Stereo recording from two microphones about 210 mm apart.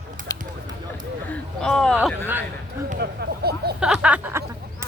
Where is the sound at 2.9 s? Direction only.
50° right (ahead or behind).